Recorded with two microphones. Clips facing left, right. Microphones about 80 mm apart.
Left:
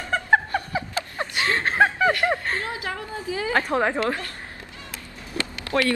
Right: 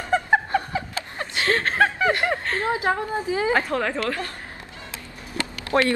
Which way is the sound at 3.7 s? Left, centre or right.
Left.